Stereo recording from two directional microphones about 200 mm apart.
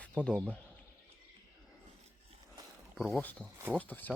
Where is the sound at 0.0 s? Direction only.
5° left (ahead or behind).